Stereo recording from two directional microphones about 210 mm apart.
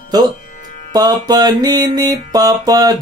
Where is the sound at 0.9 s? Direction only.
20° right (ahead or behind).